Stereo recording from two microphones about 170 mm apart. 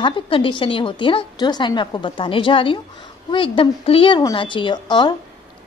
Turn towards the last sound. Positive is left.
turn(degrees=25)  # may be behind; listen again after turning